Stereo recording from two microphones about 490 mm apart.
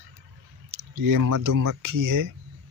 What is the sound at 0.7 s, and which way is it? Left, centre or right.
Speech, right.